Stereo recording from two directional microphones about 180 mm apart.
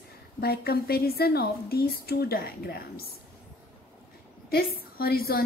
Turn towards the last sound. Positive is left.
turn(degrees=55)  # may be behind; listen again after turning